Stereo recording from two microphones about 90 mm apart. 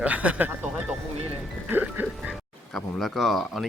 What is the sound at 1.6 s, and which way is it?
Music, 20° right (ahead or behind).